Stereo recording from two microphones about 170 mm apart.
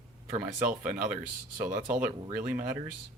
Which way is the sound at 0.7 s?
5° right (ahead or behind).